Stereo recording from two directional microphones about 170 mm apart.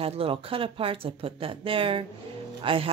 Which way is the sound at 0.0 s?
35° right (ahead or behind).